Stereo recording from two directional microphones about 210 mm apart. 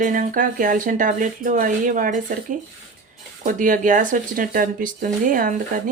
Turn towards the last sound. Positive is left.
turn(degrees=-40)  # may be behind; listen again after turning